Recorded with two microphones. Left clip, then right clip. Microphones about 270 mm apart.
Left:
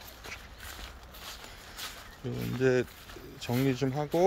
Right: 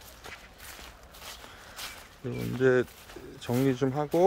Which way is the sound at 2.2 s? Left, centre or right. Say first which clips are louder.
Right 3 dB; centre.